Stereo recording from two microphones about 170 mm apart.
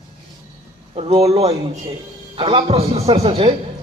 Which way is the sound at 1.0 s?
35° right (ahead or behind).